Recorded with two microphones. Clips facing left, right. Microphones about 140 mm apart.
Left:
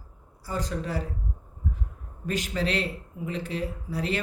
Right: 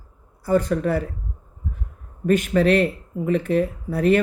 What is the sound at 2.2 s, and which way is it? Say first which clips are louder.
Speech: right 11 dB; 55° right (ahead or behind).